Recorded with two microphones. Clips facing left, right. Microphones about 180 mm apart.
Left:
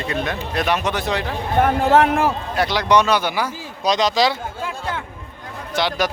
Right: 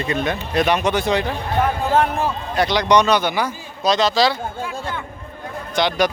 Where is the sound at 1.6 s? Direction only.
75° left (ahead or behind).